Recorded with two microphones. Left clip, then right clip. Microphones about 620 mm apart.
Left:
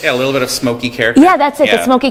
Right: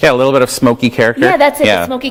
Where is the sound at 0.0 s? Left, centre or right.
Right.